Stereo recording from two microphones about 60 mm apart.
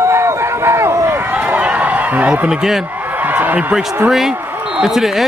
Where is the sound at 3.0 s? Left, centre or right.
Right.